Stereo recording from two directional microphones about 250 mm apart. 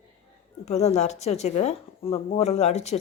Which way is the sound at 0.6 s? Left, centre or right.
Left.